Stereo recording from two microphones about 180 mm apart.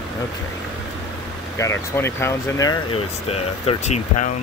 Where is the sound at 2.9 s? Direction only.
35° left (ahead or behind).